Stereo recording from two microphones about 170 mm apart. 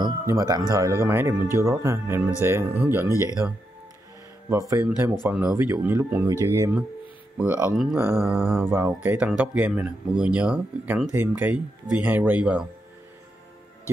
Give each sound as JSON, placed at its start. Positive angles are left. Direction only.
{"t": 0.0, "sound": "speech", "side_deg": -20}
{"t": 3.1, "sound": "speech", "side_deg": 20}
{"t": 4.5, "sound": "speech", "side_deg": -20}
{"t": 8.0, "sound": "speech", "side_deg": -15}